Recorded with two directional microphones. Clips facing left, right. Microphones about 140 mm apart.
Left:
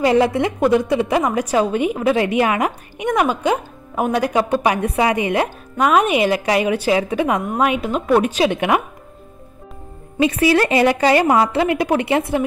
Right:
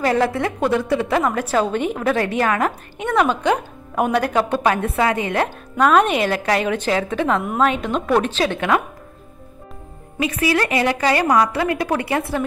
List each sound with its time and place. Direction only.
0.0 s a woman's voice: 20° left (ahead or behind)
10.1 s a woman's voice: 30° left (ahead or behind)